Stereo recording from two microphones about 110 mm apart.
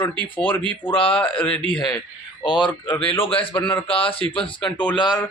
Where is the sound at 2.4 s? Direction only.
45° left (ahead or behind).